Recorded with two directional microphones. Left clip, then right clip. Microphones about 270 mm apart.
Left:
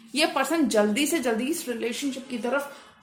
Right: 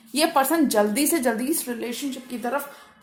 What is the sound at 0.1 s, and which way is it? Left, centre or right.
A woman's voice, right.